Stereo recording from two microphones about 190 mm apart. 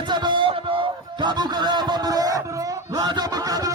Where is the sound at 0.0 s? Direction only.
25° right (ahead or behind).